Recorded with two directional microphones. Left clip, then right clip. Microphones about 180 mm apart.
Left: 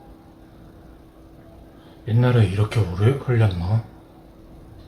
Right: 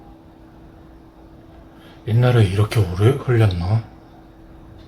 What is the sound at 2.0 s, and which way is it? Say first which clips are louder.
Speech: right 3 dB; 60° right (ahead or behind).